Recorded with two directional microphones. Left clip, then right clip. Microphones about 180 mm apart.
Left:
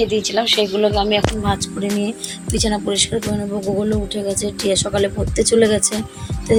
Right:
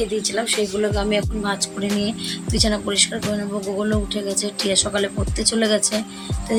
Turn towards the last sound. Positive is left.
turn(degrees=5)  # may be behind; listen again after turning